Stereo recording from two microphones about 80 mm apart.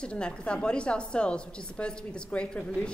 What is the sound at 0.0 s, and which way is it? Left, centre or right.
A woman's voice, centre.